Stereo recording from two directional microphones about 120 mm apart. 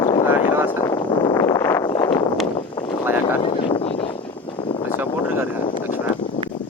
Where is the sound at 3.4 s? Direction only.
50° left (ahead or behind).